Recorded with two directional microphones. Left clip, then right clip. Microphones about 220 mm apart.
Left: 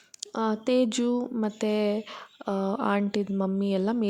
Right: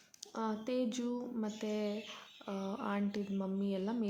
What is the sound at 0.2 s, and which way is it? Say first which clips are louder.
Speech: left 11 dB; 40° left (ahead or behind).